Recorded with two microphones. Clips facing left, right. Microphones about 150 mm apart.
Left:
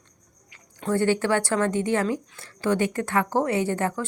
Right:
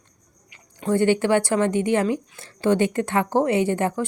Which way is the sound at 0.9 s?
20° right (ahead or behind).